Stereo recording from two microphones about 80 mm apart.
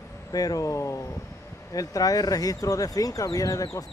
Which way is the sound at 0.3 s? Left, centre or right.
Left.